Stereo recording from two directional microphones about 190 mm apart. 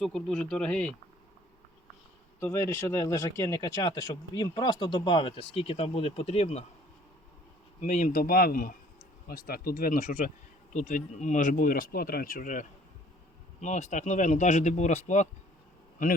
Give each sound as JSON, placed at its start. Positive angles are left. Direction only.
{"t": 0.0, "sound": "speech", "side_deg": 5}
{"t": 2.4, "sound": "speech", "side_deg": 15}
{"t": 7.8, "sound": "a man's voice", "side_deg": 40}